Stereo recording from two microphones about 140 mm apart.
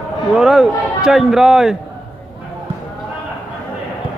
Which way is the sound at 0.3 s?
5° right (ahead or behind).